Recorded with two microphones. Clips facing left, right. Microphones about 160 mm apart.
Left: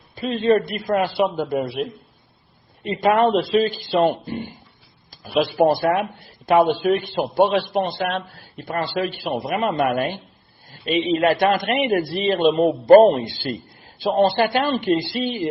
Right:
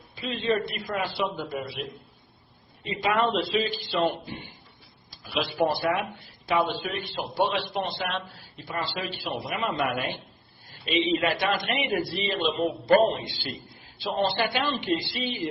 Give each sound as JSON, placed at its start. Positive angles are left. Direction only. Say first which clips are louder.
{"t": 0.2, "sound": "speech", "louder": "left 8 dB", "side_deg": 50}
{"t": 2.8, "sound": "speech", "louder": "left 8 dB", "side_deg": 50}